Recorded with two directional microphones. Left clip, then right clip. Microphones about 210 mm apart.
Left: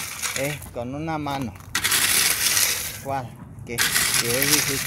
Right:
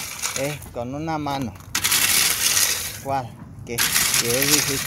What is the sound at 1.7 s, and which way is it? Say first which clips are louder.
Coin: right 1 dB; 60° right (ahead or behind).